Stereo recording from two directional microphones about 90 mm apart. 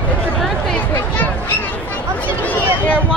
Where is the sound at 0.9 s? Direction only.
20° left (ahead or behind).